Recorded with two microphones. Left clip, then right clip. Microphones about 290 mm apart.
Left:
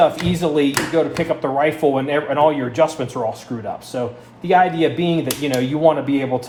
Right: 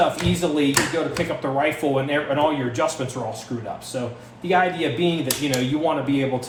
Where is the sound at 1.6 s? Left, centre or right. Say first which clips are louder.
Left 4 dB; left.